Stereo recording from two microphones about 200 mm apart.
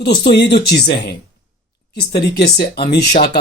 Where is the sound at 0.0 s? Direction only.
55° left (ahead or behind).